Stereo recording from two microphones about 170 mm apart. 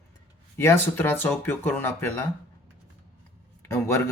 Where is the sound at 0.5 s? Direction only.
15° left (ahead or behind).